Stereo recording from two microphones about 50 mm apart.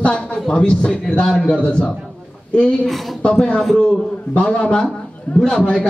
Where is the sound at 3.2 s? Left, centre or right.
Left.